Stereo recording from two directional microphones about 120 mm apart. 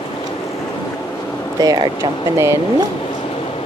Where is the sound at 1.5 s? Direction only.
35° right (ahead or behind).